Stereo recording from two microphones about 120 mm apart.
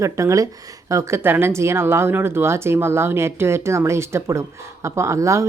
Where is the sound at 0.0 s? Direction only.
25° right (ahead or behind).